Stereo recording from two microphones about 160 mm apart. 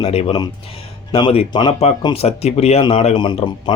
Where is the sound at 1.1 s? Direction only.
30° left (ahead or behind).